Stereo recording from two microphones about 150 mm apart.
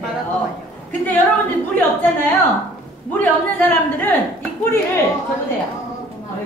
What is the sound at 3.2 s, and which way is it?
Speech, 15° left (ahead or behind).